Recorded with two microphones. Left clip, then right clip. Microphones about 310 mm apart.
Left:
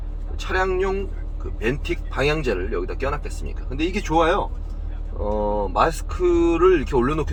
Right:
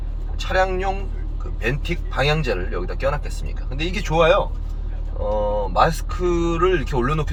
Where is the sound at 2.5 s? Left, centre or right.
Centre.